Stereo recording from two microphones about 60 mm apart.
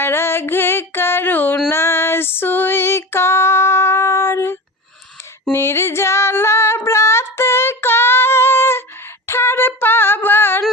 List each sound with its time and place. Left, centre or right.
0.0 s music: left
1.7 s female singing: left
5.5 s female singing: left
9.2 s a sound: left